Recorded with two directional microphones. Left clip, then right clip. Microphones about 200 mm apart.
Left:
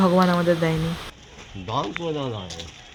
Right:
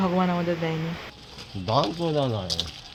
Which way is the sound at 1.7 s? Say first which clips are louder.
Right 3 dB; 60° right (ahead or behind).